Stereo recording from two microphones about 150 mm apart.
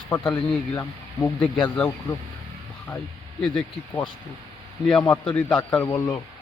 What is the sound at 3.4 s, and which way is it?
A man's voice, 5° left (ahead or behind).